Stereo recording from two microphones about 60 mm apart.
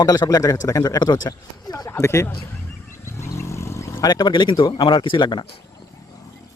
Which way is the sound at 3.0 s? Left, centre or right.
Left.